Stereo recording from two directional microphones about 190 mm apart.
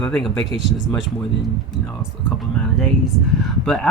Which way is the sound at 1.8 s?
5° left (ahead or behind).